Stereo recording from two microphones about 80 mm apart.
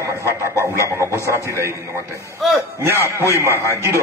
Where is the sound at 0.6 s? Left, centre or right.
Right.